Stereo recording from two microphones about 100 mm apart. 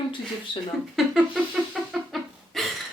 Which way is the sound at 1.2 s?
5° right (ahead or behind).